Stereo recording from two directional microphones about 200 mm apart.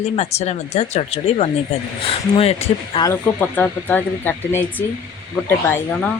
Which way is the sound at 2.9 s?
20° left (ahead or behind).